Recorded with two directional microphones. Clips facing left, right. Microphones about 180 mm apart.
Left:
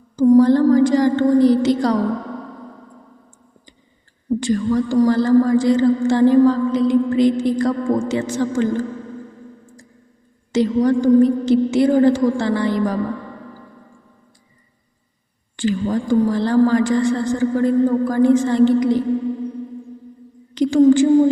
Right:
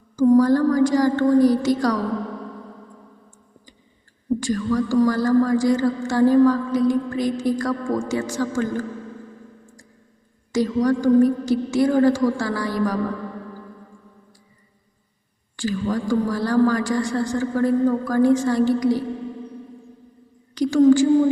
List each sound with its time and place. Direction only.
0.2 s speech: 20° left (ahead or behind)
4.4 s speech: 20° left (ahead or behind)
10.5 s speech: 25° left (ahead or behind)
15.5 s speech: 20° left (ahead or behind)
20.6 s a woman's voice: 20° left (ahead or behind)